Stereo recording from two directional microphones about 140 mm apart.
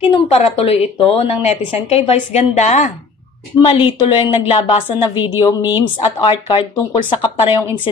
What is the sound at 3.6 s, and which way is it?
Speech, 35° left (ahead or behind).